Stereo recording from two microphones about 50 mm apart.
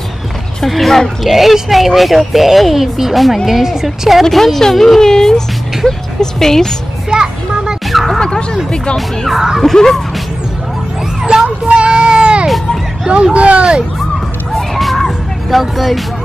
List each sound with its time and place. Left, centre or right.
0.7 s speech: centre
6.4 s music: centre
7.1 s children playing: centre
7.9 s speech: centre
8.2 s music: centre
8.9 s speech: centre
9.6 s music: centre
11.4 s child singing: right
13.1 s speech: right
14.5 s a sound: centre